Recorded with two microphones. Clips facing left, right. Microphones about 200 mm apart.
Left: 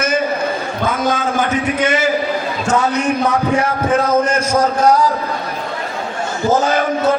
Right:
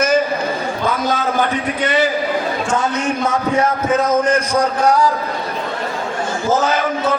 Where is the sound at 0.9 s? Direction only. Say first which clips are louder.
Left 1 dB; 50° left (ahead or behind); by 4.4 s 30° left (ahead or behind).